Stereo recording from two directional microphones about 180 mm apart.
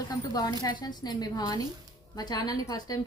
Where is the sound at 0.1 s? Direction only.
20° left (ahead or behind).